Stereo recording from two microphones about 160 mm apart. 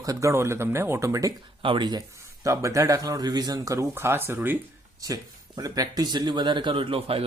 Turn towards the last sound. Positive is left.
turn(degrees=-35)  # may be behind; listen again after turning